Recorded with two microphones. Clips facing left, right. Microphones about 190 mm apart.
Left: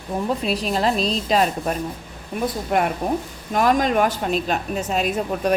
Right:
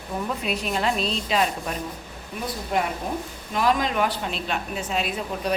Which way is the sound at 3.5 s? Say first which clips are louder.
Left 5 dB; 45° left (ahead or behind).